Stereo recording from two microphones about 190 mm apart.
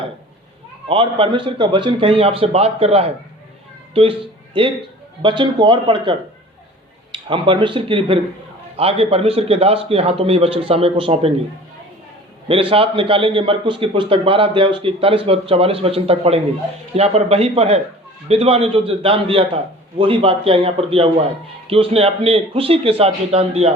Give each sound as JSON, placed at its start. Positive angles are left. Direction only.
{"t": 0.9, "sound": "a man's voice", "side_deg": -30}
{"t": 12.5, "sound": "a man's voice", "side_deg": -30}